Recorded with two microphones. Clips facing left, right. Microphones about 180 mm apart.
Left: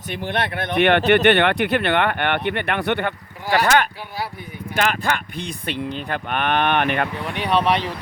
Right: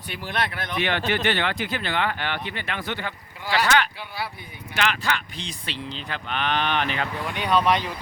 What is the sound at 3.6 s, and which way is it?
Speech, 50° left (ahead or behind).